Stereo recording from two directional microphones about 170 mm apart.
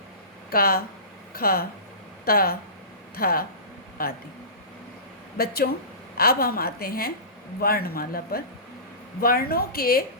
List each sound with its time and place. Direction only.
0.5 s a woman's voice: 60° left (ahead or behind)
5.4 s a woman's voice: 65° left (ahead or behind)